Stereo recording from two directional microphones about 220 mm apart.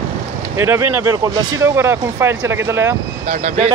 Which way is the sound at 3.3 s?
30° right (ahead or behind).